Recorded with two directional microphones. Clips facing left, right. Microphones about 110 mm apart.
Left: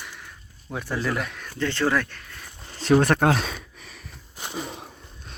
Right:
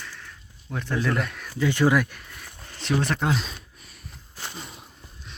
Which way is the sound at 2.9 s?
55° left (ahead or behind).